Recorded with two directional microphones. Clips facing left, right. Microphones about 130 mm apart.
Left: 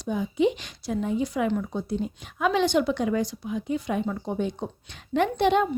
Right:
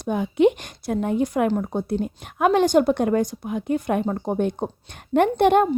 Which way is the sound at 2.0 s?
55° right (ahead or behind).